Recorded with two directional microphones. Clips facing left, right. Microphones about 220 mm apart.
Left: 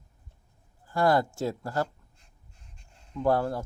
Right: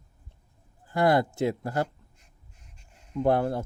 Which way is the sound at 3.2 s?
20° right (ahead or behind).